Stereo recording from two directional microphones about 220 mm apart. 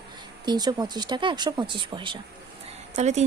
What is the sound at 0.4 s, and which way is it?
Speech, 20° right (ahead or behind).